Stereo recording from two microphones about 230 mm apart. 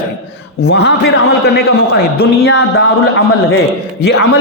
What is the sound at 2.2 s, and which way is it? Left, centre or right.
A man's voice, left.